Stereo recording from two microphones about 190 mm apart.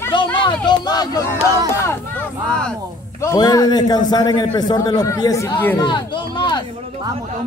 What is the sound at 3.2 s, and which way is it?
A man's voice, 20° left (ahead or behind).